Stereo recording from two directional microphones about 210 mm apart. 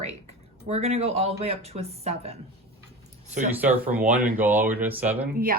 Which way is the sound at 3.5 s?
10° right (ahead or behind).